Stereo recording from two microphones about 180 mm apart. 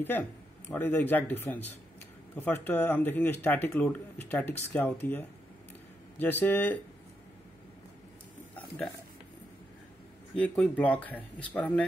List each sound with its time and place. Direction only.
0.0 s speech: 10° left (ahead or behind)
6.4 s speech: 10° left (ahead or behind)
8.5 s a sound: 5° left (ahead or behind)
10.3 s speech: 5° left (ahead or behind)